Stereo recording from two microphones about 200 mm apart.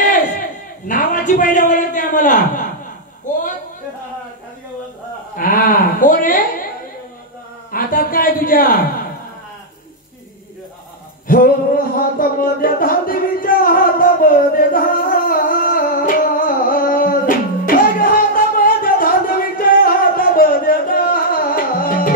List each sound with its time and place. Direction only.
0.8 s a man's voice: 40° left (ahead or behind)
3.3 s a sound: 40° left (ahead or behind)
5.3 s speech: 45° left (ahead or behind)
7.7 s speech: 45° left (ahead or behind)
11.2 s a sound: 45° left (ahead or behind)
17.6 s music: 45° left (ahead or behind)